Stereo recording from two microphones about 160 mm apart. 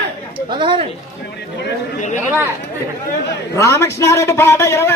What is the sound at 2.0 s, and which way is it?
Speech, 50° left (ahead or behind).